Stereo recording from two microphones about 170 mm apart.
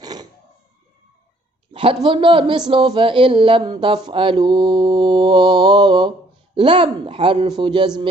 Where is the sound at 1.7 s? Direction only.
30° right (ahead or behind).